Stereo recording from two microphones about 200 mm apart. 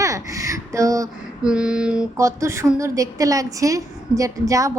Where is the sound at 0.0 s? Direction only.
15° right (ahead or behind).